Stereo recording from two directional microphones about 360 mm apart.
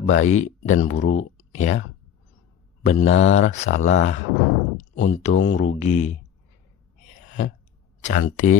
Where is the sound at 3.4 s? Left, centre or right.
Centre.